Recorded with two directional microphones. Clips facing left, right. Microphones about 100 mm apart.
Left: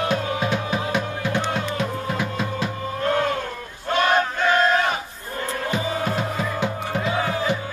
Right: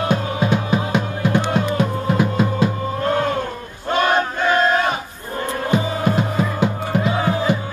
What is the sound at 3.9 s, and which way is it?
Battle cry, 35° right (ahead or behind).